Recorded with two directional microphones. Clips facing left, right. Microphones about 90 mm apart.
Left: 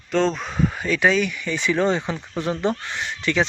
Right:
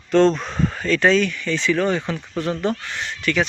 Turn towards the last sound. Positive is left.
turn(degrees=25)  # may be behind; listen again after turning